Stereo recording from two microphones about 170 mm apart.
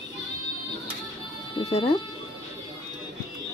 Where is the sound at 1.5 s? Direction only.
30° left (ahead or behind).